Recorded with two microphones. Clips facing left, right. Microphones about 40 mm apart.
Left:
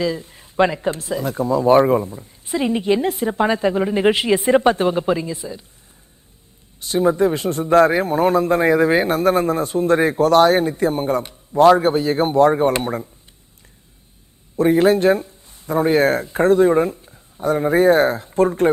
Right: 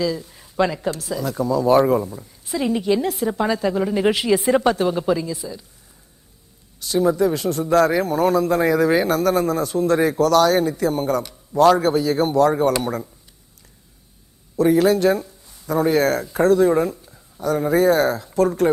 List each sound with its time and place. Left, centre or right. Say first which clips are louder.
0.0 s speech: left 1 dB; left
6.7 s a man's voice: left 1 dB; left
14.5 s a man's voice: left 1 dB; left